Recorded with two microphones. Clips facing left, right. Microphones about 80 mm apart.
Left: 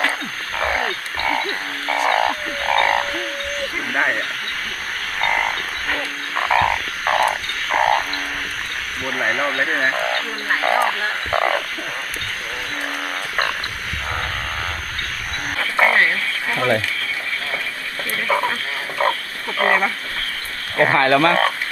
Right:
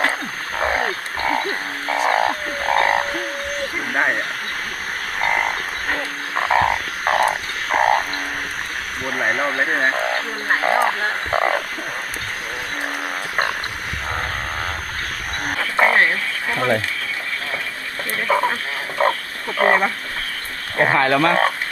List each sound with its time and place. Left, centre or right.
0.5 s frog: right
5.2 s frog: centre
9.0 s frog: centre
15.5 s radio: right
18.3 s radio: centre
19.0 s wild animals: right
19.5 s a sound: centre
20.8 s speech: centre